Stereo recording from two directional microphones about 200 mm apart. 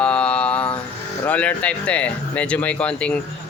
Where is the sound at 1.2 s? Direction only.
5° left (ahead or behind).